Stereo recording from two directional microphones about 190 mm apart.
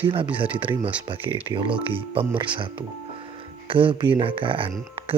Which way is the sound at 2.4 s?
25° right (ahead or behind).